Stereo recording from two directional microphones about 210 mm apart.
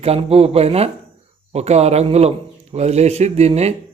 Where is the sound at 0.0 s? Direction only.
30° right (ahead or behind).